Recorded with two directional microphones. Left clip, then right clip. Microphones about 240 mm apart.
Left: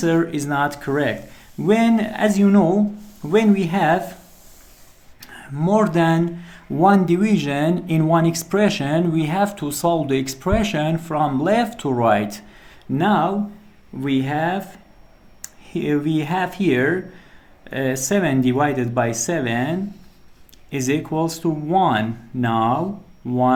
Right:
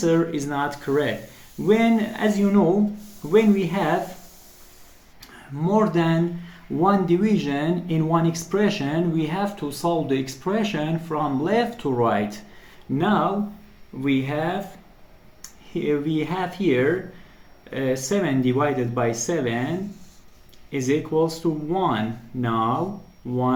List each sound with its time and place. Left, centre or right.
0.0 s speech: left
5.2 s speech: left